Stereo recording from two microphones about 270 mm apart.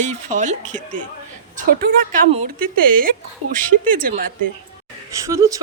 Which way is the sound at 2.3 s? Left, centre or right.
Right.